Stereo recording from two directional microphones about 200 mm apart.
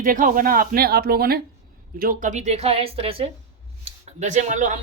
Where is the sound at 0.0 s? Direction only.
45° right (ahead or behind).